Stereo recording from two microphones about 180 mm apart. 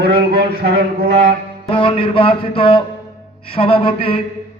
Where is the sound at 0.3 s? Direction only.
65° right (ahead or behind).